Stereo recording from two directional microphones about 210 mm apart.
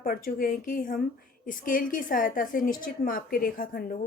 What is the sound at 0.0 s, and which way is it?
A woman's voice, 45° left (ahead or behind).